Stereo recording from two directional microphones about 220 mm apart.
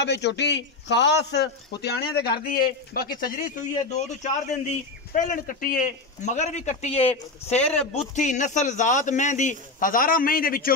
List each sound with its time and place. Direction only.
0.0 s a man's voice: 50° left (ahead or behind)